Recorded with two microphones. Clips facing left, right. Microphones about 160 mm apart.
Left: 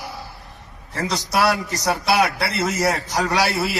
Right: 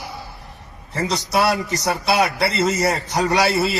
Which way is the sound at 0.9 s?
20° right (ahead or behind).